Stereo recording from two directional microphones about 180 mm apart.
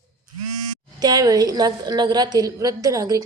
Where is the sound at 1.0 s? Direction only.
20° right (ahead or behind).